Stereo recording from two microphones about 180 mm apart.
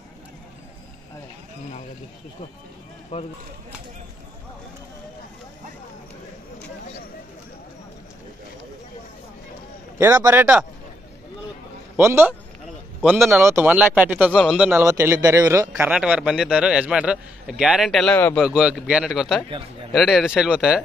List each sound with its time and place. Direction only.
3.1 s speech: 45° left (ahead or behind)
9.9 s speech: 20° right (ahead or behind)
12.0 s speech: 15° right (ahead or behind)
13.0 s a man's voice: 5° left (ahead or behind)
13.3 s speech: 15° right (ahead or behind)
15.9 s a man's voice: 5° right (ahead or behind)
18.4 s a man's voice: 5° right (ahead or behind)